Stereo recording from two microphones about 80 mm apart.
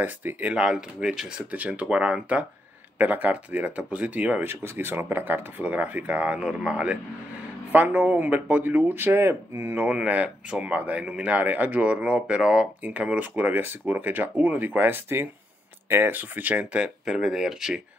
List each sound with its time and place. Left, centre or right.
0.0 s speech: right; by 1.2 s centre
1.5 s speech: centre
9.8 s speech: centre